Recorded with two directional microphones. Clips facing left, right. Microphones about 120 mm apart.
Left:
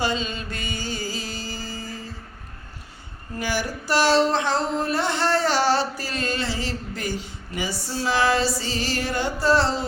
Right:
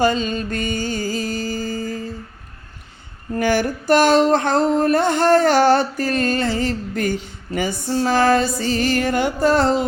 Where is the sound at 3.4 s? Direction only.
55° right (ahead or behind).